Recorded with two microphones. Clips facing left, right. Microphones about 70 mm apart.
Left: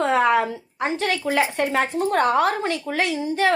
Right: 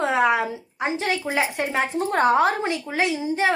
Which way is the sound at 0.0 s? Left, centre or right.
Centre.